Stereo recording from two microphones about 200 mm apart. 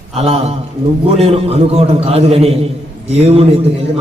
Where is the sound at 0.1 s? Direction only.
30° right (ahead or behind).